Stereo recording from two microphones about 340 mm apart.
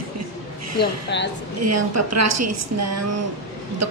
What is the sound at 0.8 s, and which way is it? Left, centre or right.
Speech, left.